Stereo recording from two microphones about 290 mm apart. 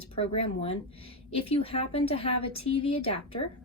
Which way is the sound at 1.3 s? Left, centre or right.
Centre.